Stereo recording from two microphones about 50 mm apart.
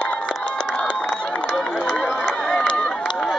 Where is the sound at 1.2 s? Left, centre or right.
Left.